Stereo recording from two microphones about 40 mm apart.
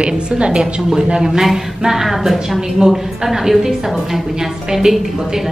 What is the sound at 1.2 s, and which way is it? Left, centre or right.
A woman's voice, centre.